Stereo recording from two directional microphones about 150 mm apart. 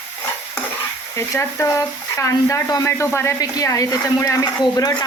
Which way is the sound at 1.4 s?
20° left (ahead or behind).